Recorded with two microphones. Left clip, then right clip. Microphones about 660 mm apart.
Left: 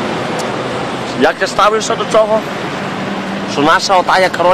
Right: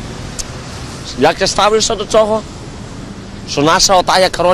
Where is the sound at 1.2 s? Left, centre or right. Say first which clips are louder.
Even; right.